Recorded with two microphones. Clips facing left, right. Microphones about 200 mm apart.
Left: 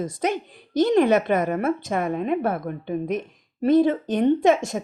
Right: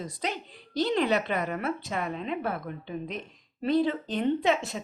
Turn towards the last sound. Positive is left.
turn(degrees=45)  # may be behind; listen again after turning